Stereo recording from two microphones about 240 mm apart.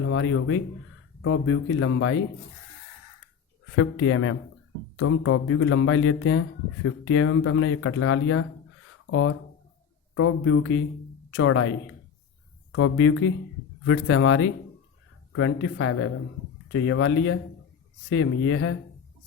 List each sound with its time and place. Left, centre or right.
0.0 s speech: left
3.7 s speech: left